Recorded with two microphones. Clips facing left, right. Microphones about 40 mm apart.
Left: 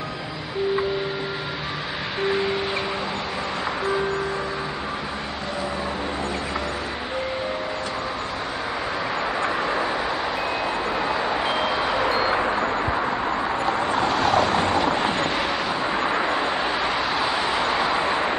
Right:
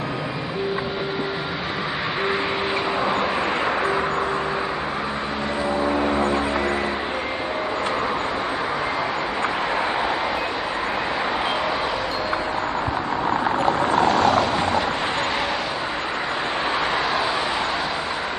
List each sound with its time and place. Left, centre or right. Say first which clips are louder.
14.1 s vehicle: right 1 dB; centre